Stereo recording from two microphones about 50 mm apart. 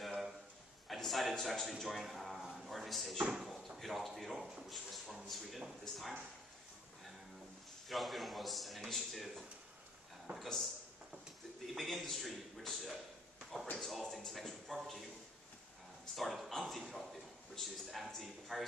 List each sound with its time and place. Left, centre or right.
0.0 s a sound: centre
0.8 s a man's voice: centre
2.5 s a sound: centre
3.4 s speech: centre
7.9 s speech: centre
16.2 s a man's voice: centre